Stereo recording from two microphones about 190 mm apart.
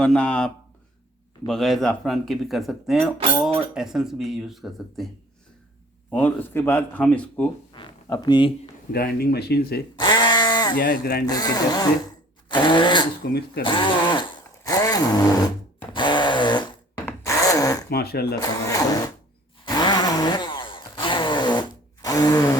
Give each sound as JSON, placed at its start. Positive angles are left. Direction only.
{"t": 0.0, "sound": "speech", "side_deg": 5}
{"t": 6.1, "sound": "speech", "side_deg": 10}
{"t": 7.7, "sound": "speech", "side_deg": 20}
{"t": 8.9, "sound": "speech", "side_deg": 55}
{"t": 9.9, "sound": "a sound", "side_deg": 20}
{"t": 10.8, "sound": "speech", "side_deg": 55}
{"t": 11.3, "sound": "speech", "side_deg": 20}
{"t": 13.6, "sound": "a sound", "side_deg": 25}
{"t": 17.1, "sound": "zipper", "side_deg": 15}
{"t": 17.8, "sound": "speech", "side_deg": 55}
{"t": 18.3, "sound": "speech", "side_deg": 20}
{"t": 19.6, "sound": "chainsaw", "side_deg": 20}